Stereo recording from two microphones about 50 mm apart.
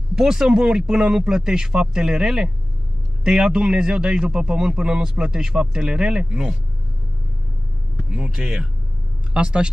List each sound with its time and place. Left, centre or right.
0.1 s speech: centre
8.1 s speech: centre